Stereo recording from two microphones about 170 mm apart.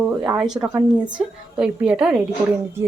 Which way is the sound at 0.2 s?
5° right (ahead or behind).